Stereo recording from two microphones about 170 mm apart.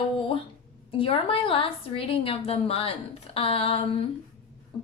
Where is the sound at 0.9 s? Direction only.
35° left (ahead or behind).